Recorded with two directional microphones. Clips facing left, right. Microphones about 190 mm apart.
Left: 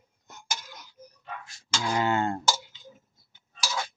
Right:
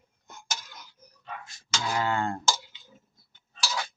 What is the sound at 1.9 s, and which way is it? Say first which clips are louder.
Speech: left 2 dB; 20° left (ahead or behind).